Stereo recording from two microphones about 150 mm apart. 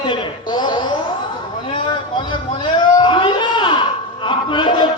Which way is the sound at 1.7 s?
30° left (ahead or behind).